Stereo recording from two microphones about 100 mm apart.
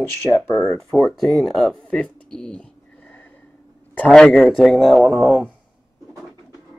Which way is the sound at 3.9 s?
10° left (ahead or behind).